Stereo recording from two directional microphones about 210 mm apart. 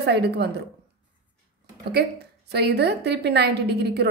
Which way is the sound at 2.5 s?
50° right (ahead or behind).